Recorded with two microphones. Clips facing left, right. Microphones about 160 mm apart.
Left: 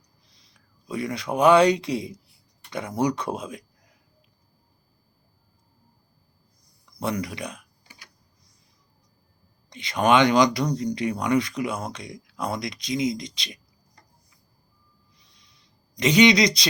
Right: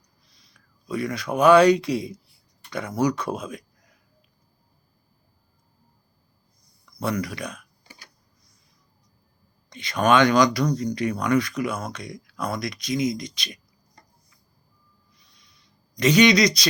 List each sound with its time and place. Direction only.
0.3 s speech: 25° left (ahead or behind)
7.0 s speech: 20° left (ahead or behind)
7.9 s typing: 35° right (ahead or behind)
9.7 s speech: 20° left (ahead or behind)
15.6 s speech: 20° left (ahead or behind)